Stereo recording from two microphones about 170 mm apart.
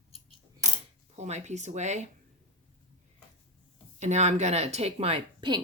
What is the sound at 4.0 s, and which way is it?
Speech, 40° right (ahead or behind).